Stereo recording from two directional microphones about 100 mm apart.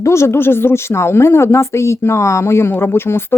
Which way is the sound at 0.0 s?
30° left (ahead or behind).